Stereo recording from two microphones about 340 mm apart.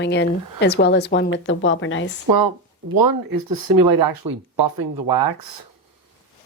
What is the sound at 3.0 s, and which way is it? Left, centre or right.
Speech, right.